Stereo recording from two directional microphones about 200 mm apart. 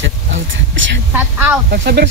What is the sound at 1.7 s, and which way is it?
Speech, 50° right (ahead or behind).